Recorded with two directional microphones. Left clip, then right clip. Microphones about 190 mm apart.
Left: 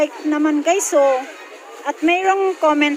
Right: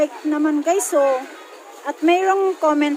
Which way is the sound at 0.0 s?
Centre (ahead or behind).